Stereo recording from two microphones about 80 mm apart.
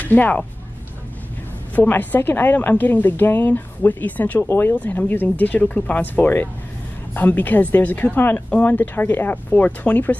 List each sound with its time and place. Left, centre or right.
0.0 s speech: left
1.8 s speech: left
4.4 s speech: left